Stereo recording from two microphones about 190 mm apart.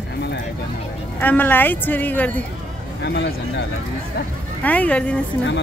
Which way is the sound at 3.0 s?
65° left (ahead or behind).